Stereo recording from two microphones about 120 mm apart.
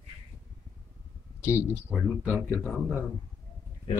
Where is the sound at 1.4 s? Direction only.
20° left (ahead or behind).